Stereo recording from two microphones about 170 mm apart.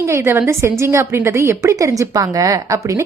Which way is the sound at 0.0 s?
15° right (ahead or behind).